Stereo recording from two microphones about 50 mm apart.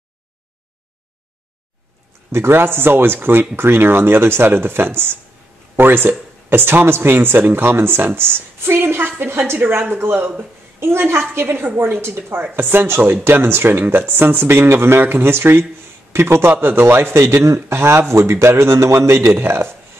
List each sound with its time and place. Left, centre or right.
2.3 s a man's voice: right
2.6 s speech: right
11.7 s a woman's voice: right
12.0 s speech: right
16.1 s a man's voice: right
16.6 s a man's voice: right